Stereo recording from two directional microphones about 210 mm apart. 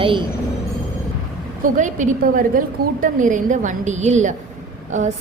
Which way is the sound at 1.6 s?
35° right (ahead or behind).